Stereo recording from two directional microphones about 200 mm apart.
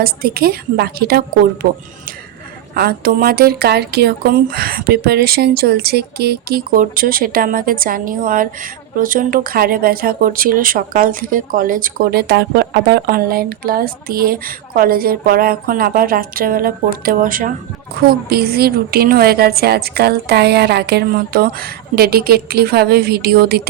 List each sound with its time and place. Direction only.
0.0 s speech: 50° right (ahead or behind)